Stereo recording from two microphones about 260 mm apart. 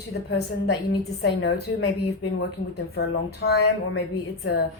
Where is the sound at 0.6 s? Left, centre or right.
Left.